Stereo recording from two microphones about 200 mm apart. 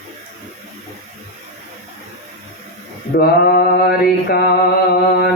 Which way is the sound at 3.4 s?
50° left (ahead or behind).